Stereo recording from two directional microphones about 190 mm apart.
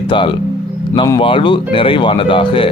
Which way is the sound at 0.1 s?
25° left (ahead or behind).